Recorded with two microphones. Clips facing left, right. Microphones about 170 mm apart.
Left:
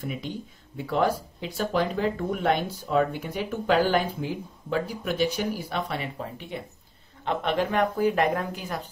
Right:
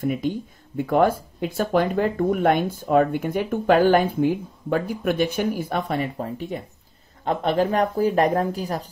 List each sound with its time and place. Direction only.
0.7 s speech: 50° right (ahead or behind)